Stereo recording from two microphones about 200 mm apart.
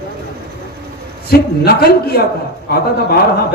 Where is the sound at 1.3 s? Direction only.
50° left (ahead or behind).